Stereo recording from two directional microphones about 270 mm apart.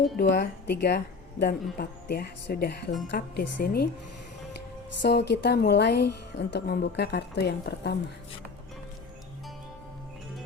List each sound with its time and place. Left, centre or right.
0.2 s a woman's voice: left
5.0 s a woman's voice: left